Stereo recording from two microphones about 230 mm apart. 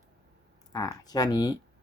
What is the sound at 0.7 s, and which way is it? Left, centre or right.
Speech, centre.